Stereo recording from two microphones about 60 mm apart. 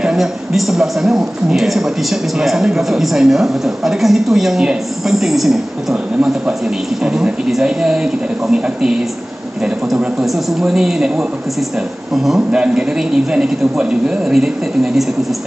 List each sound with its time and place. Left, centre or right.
0.0 s a man's voice: centre
7.0 s speech: centre
10.2 s a man's voice: centre
12.4 s speech: centre